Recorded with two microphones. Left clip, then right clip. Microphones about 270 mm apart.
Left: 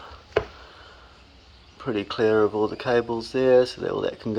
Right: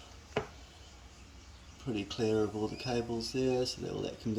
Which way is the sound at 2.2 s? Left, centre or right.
Left.